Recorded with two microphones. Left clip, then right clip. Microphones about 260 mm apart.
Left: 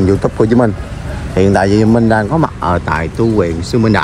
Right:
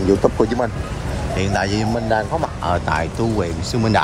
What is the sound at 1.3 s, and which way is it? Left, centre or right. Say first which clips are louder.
Speech: left 10 dB; centre.